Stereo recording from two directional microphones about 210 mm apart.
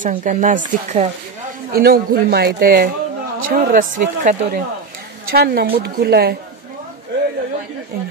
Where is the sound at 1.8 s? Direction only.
45° right (ahead or behind).